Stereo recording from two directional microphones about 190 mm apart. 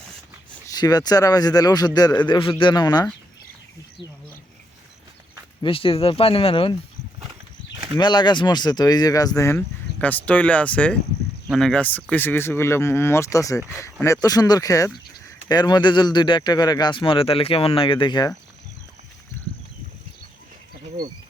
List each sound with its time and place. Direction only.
0.7 s a man's voice: 20° left (ahead or behind)
5.6 s a man's voice: 30° left (ahead or behind)
7.9 s a man's voice: 25° left (ahead or behind)